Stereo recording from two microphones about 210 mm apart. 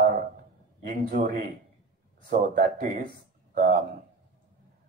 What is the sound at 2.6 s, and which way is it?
A man's voice, 45° right (ahead or behind).